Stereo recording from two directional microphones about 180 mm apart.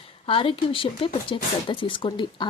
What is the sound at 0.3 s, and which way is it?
Speech, 30° left (ahead or behind).